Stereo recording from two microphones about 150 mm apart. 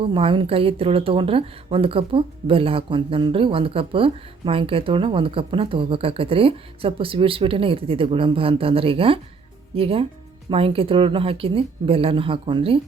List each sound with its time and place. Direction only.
0.0 s speech: 35° right (ahead or behind)